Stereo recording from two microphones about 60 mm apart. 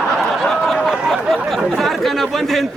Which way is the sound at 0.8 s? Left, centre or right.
Centre.